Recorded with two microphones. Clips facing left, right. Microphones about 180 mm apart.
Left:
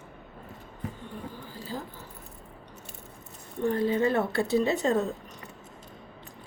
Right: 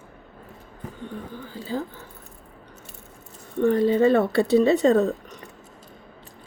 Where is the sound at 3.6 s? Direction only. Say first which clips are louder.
Right 7 dB; 70° right (ahead or behind).